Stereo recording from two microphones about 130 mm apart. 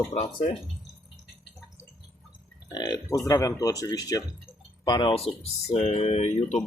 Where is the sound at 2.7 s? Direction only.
30° left (ahead or behind).